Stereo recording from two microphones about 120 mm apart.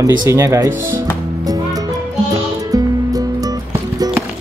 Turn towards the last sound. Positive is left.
turn(degrees=-30)  # may be behind; listen again after turning